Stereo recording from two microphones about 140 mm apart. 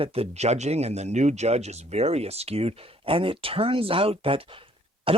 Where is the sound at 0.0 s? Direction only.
45° right (ahead or behind).